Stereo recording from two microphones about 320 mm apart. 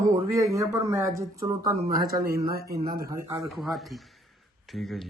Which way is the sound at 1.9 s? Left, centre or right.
Right.